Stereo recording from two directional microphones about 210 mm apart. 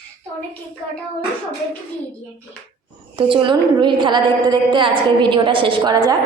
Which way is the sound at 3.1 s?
25° right (ahead or behind).